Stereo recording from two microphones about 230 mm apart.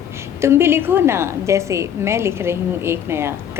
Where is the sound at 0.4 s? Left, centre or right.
Centre.